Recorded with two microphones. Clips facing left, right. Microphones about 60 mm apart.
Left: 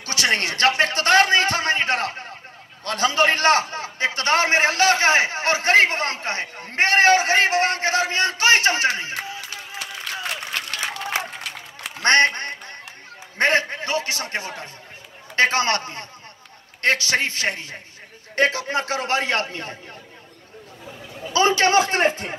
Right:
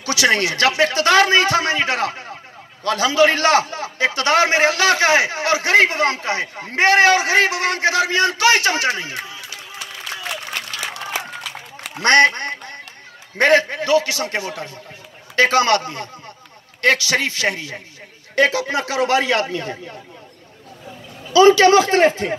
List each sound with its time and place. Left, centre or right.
0.0 s a man's voice: left
12.0 s a man's voice: left
13.4 s a man's voice: left
16.8 s a man's voice: left
21.3 s a man's voice: left